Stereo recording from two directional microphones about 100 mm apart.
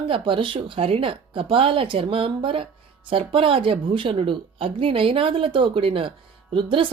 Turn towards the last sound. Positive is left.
turn(degrees=-60)  # may be behind; listen again after turning